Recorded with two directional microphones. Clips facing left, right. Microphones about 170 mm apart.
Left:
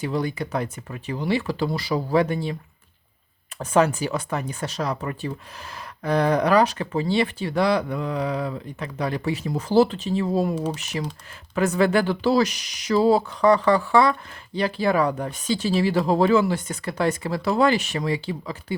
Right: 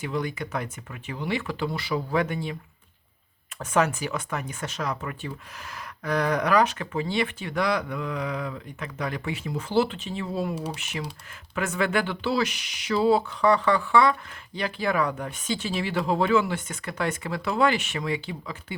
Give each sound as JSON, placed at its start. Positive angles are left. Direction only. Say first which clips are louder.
{"t": 0.0, "sound": "speech", "louder": "left 4 dB", "side_deg": 35}
{"t": 3.6, "sound": "speech", "louder": "left 4 dB", "side_deg": 35}